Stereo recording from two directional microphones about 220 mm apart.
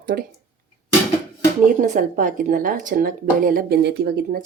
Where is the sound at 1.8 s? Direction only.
35° right (ahead or behind).